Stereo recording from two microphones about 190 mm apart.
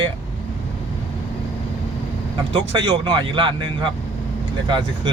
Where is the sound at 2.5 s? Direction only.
25° right (ahead or behind).